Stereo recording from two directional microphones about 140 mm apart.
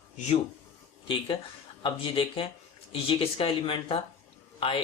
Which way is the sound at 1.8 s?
35° left (ahead or behind).